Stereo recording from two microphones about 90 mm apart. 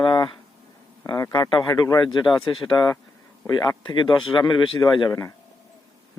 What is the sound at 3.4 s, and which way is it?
Speech, 45° left (ahead or behind).